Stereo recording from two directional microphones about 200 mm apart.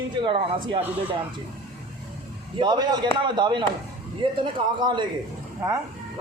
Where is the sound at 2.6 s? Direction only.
20° right (ahead or behind).